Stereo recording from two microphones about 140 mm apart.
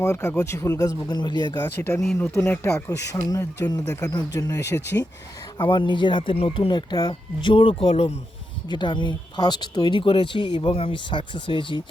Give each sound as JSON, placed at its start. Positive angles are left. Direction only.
{"t": 0.0, "sound": "speech", "side_deg": 20}
{"t": 1.5, "sound": "speech", "side_deg": 15}
{"t": 8.7, "sound": "speech", "side_deg": 35}